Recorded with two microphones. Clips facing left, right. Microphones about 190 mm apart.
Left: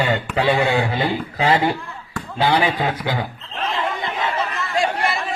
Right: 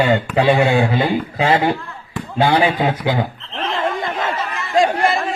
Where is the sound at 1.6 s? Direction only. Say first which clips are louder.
Right 2 dB; 20° right (ahead or behind).